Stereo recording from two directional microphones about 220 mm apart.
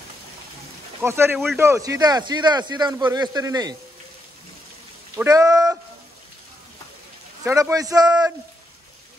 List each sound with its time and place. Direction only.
1.0 s speech: 10° right (ahead or behind)
5.1 s speech: 15° right (ahead or behind)
7.4 s speech: 15° right (ahead or behind)